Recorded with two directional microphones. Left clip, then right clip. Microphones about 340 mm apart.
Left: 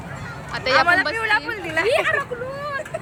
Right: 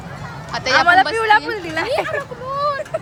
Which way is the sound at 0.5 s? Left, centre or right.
Centre.